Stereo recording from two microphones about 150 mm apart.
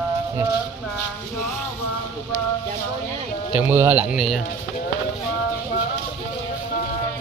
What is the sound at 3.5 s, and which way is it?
Speech, 15° right (ahead or behind).